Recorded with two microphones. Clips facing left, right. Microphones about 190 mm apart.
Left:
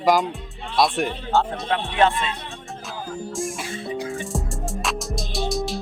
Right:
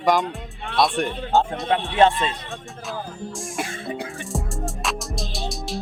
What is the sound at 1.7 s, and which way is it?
Speech, 30° right (ahead or behind).